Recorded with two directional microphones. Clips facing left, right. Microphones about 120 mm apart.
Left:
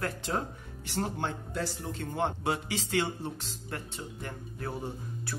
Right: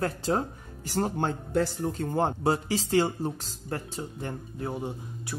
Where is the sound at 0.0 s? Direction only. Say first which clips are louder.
Right 5 dB; 35° right (ahead or behind).